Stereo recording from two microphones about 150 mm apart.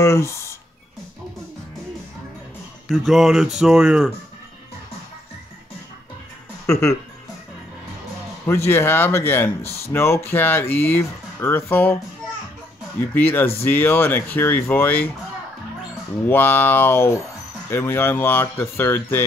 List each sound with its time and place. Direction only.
0.0 s speech: 20° left (ahead or behind)
2.9 s speech: centre (ahead or behind)
6.6 s speech: 20° left (ahead or behind)
8.5 s speech: 15° left (ahead or behind)
13.1 s speech: 15° left (ahead or behind)
16.3 s speech: 15° left (ahead or behind)